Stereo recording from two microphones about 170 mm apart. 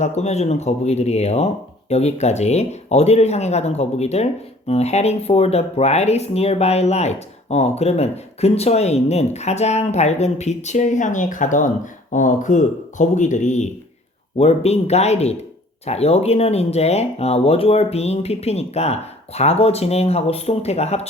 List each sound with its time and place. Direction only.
0.0 s speech: 40° left (ahead or behind)